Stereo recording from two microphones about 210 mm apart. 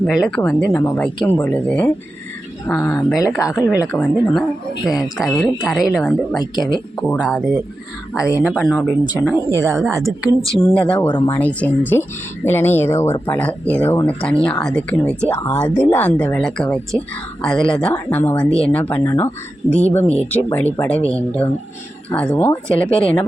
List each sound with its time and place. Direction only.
0.0 s speech: centre (ahead or behind)
3.5 s a woman's voice: 5° right (ahead or behind)
6.4 s speech: 20° left (ahead or behind)
7.2 s speech: centre (ahead or behind)
9.6 s a woman's voice: 10° right (ahead or behind)
10.1 s speech: 5° left (ahead or behind)